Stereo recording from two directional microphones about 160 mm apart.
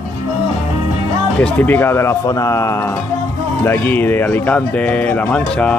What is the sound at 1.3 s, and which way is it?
Speech, 10° left (ahead or behind).